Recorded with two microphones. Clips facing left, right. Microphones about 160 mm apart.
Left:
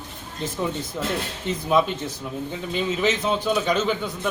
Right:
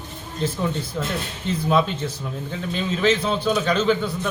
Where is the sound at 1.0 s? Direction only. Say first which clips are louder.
Even; 10° left (ahead or behind).